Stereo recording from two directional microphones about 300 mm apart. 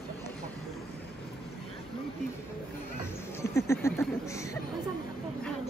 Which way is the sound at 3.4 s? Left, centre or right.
Centre.